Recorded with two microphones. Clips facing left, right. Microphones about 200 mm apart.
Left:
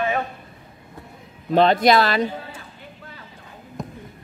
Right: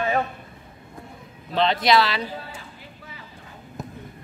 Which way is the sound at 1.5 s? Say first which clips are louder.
Left 5 dB; 50° left (ahead or behind).